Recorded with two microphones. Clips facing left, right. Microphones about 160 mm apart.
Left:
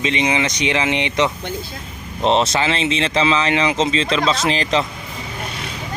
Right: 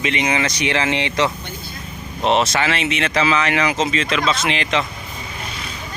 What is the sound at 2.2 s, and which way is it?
Speech, 30° left (ahead or behind).